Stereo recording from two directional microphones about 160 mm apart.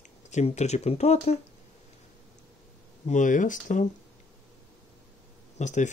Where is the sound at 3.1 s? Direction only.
50° left (ahead or behind).